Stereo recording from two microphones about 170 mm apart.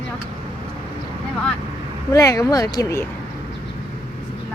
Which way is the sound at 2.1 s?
20° left (ahead or behind).